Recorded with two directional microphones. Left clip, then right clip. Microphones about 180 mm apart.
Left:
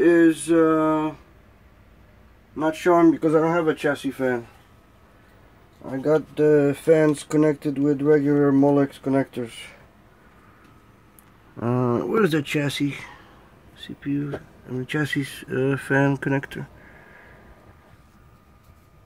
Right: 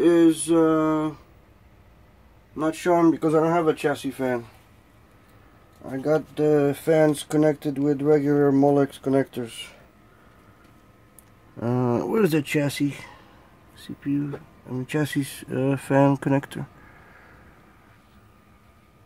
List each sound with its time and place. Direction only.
0.0 s speech: 15° right (ahead or behind)
2.6 s speech: 10° right (ahead or behind)
6.0 s speech: 5° right (ahead or behind)
11.5 s speech: 10° right (ahead or behind)
12.2 s speech: 25° right (ahead or behind)
14.7 s speech: 15° right (ahead or behind)